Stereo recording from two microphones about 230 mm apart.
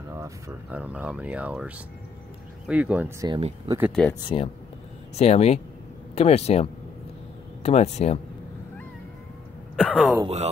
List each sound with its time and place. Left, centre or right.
0.1 s speech: centre
2.7 s speech: centre
3.3 s speech: right
4.1 s speech: centre
9.8 s speech: centre
10.2 s speech: right